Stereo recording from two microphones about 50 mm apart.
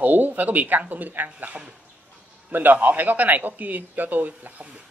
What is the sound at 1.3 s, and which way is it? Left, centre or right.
A man's voice, right.